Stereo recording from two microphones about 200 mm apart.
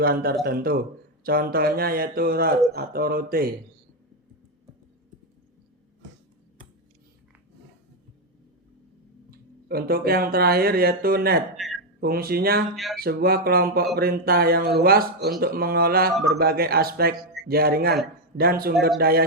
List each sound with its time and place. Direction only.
0.0 s speech: 50° right (ahead or behind)
9.3 s speech: 50° right (ahead or behind)
11.5 s a sound: centre (ahead or behind)
11.9 s speech: 50° right (ahead or behind)
12.7 s speech: centre (ahead or behind)
13.0 s speech: 50° right (ahead or behind)